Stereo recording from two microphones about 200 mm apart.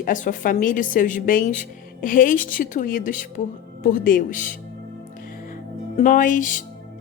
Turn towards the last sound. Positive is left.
turn(degrees=40)  # may be behind; listen again after turning